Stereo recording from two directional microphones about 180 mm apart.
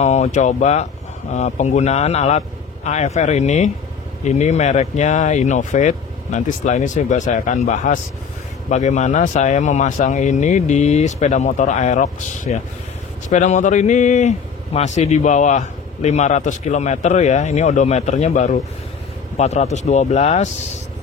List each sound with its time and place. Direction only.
0.0 s speech: 35° left (ahead or behind)